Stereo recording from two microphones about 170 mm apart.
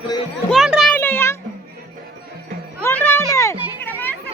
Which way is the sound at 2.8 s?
15° left (ahead or behind).